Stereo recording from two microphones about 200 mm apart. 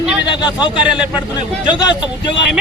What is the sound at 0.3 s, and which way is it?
Speech, 20° left (ahead or behind).